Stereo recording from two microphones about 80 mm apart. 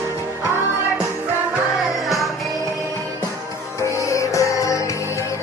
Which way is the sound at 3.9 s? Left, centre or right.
Left.